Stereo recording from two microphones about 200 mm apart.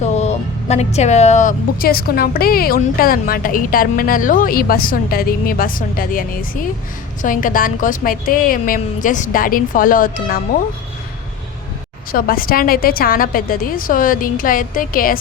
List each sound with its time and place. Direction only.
0.0 s a woman's voice: 35° left (ahead or behind)
12.1 s a woman's voice: 45° left (ahead or behind)